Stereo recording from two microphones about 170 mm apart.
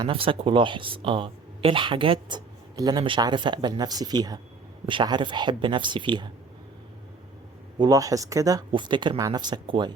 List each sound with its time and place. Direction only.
0.0 s speech: 30° right (ahead or behind)
7.8 s speech: 20° right (ahead or behind)